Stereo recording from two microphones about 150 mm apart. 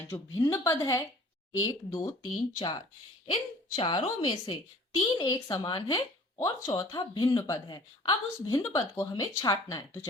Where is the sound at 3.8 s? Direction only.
35° left (ahead or behind).